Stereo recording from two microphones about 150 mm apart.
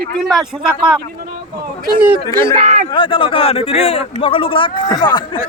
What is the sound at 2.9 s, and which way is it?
A man's voice, 35° left (ahead or behind).